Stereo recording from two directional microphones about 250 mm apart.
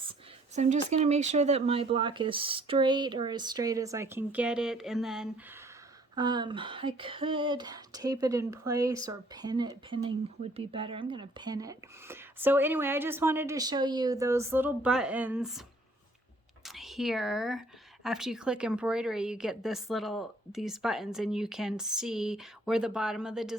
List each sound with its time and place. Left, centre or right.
0.5 s speech: right; by 5.6 s centre
6.1 s speech: centre
16.6 s speech: centre